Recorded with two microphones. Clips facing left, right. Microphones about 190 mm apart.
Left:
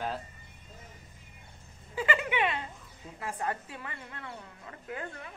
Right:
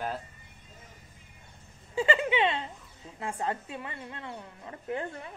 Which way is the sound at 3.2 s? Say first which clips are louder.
Right 2 dB; 25° right (ahead or behind).